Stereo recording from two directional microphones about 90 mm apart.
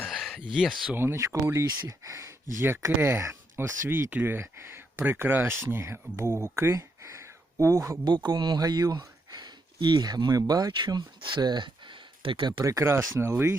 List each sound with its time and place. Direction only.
0.1 s a sound: 5° right (ahead or behind)
0.5 s speech: 5° right (ahead or behind)
0.9 s speech: 30° right (ahead or behind)
8.0 s speech: 55° right (ahead or behind)
12.6 s speech: 35° right (ahead or behind)